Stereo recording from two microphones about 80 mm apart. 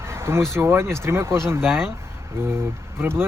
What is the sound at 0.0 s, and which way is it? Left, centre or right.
Speech, right.